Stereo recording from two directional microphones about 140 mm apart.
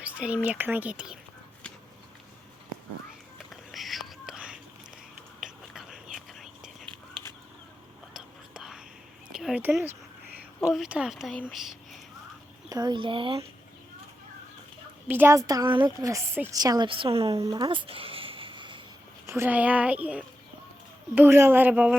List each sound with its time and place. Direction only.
0.0 s a sound: 10° right (ahead or behind)
0.4 s speech: 10° right (ahead or behind)
3.3 s whispering: centre (ahead or behind)
5.7 s whispering: 5° right (ahead or behind)
8.1 s whispering: 5° right (ahead or behind)
9.3 s a sound: 5° right (ahead or behind)
10.8 s speech: 5° right (ahead or behind)
11.6 s a sound: centre (ahead or behind)
12.6 s a woman's voice: 30° right (ahead or behind)
15.0 s a woman's voice: 15° right (ahead or behind)
16.6 s a woman's voice: 30° right (ahead or behind)
17.3 s a sound: 25° right (ahead or behind)
19.2 s speech: 20° right (ahead or behind)